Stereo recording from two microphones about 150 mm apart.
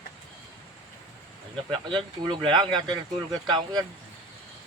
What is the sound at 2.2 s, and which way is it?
Speech, 30° right (ahead or behind).